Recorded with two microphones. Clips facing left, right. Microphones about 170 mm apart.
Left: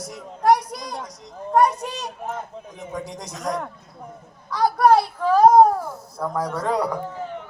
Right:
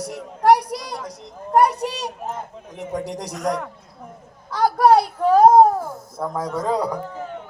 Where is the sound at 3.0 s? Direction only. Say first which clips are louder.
Right 5 dB; 70° right (ahead or behind).